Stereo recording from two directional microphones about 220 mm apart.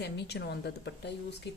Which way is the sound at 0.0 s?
50° left (ahead or behind).